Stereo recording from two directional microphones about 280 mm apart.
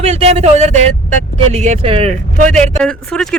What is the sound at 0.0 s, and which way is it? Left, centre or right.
A man's voice, right.